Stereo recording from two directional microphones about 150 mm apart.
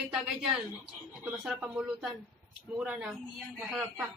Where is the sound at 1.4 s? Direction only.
5° right (ahead or behind).